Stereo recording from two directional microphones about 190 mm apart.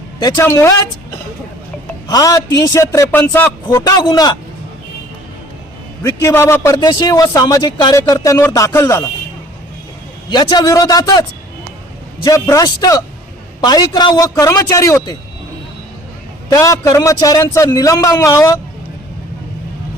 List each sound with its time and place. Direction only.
0.2 s a man's voice: 15° left (ahead or behind)
2.0 s a man's voice: 20° left (ahead or behind)
6.0 s a man's voice: 15° left (ahead or behind)
10.2 s a man's voice: 25° left (ahead or behind)
16.5 s a man's voice: 15° left (ahead or behind)